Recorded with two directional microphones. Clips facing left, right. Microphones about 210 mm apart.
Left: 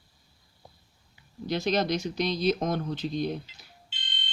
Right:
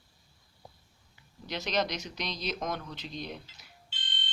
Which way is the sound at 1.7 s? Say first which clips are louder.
Left 4 dB; 30° left (ahead or behind).